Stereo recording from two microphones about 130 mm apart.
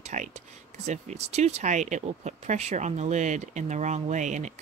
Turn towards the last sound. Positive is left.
turn(degrees=-70)  # may be behind; listen again after turning